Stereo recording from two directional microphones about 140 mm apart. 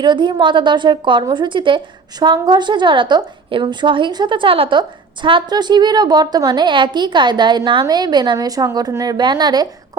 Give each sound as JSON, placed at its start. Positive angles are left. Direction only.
{"t": 0.0, "sound": "a woman's voice", "side_deg": -35}